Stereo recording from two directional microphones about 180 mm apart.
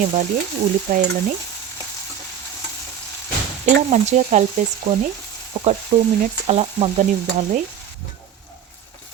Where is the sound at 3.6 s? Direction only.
40° right (ahead or behind).